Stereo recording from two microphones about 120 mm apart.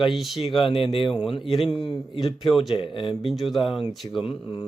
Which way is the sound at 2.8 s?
45° left (ahead or behind).